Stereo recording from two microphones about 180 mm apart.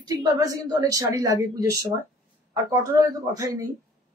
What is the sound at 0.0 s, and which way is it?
A woman's voice, 20° right (ahead or behind).